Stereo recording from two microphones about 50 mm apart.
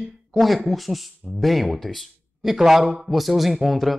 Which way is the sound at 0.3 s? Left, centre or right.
Centre.